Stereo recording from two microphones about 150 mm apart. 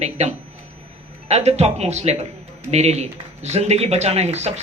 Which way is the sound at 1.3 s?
45° right (ahead or behind).